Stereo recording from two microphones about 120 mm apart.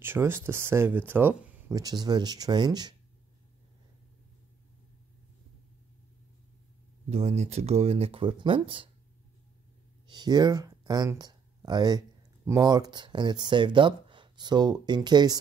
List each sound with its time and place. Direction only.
0.0 s speech: 20° right (ahead or behind)
1.8 s speech: 35° right (ahead or behind)
7.1 s speech: 60° right (ahead or behind)
10.0 s speech: 35° right (ahead or behind)